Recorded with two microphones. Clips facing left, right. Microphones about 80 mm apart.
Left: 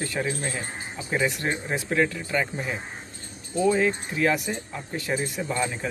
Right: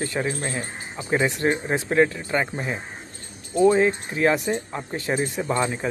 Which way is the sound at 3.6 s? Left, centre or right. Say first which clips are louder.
Right 5 dB; right.